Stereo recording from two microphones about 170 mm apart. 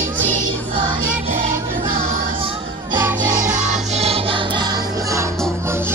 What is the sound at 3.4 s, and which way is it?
Music, 45° right (ahead or behind).